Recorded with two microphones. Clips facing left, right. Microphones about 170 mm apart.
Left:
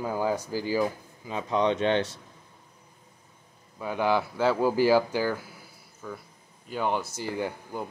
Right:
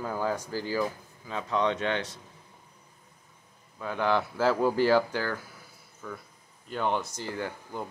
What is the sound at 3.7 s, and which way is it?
Speech, 10° left (ahead or behind).